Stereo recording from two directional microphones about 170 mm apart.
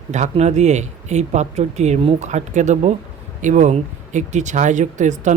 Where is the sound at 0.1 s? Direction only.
40° right (ahead or behind).